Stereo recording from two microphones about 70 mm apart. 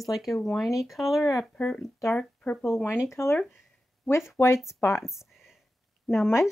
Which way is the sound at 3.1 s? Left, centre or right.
Left.